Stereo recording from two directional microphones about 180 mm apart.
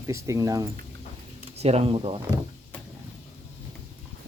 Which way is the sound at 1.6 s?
35° right (ahead or behind).